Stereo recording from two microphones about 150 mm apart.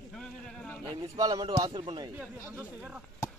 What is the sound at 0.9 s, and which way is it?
A man's voice, 25° right (ahead or behind).